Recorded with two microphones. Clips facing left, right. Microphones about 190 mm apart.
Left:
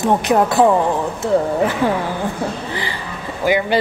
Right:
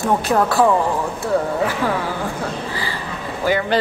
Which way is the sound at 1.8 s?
20° left (ahead or behind).